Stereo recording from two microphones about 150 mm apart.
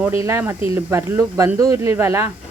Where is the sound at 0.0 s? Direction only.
15° right (ahead or behind).